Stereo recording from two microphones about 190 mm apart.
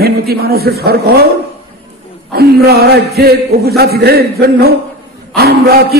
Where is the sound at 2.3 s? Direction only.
55° right (ahead or behind).